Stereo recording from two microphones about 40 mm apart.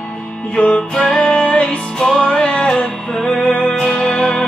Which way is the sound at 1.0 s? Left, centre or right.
Centre.